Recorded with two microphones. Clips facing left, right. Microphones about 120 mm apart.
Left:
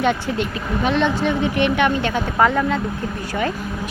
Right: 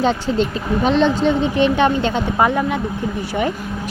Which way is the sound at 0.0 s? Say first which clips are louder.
Right 3 dB; 30° right (ahead or behind).